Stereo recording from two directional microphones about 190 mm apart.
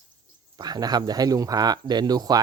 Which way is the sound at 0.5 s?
20° right (ahead or behind).